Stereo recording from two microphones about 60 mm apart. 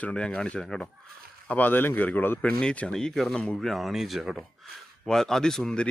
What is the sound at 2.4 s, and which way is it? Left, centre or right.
Speech, centre.